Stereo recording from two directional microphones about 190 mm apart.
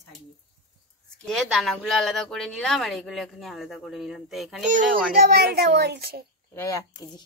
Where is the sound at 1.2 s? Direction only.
Centre (ahead or behind).